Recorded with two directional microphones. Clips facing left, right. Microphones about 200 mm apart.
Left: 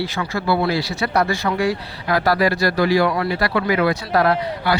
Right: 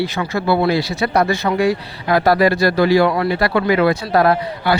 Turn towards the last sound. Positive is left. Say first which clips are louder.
# right 3 dB
turn(degrees=-25)  # may be behind; listen again after turning